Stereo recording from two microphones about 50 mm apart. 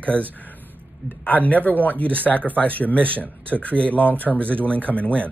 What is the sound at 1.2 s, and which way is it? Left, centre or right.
Speech, left.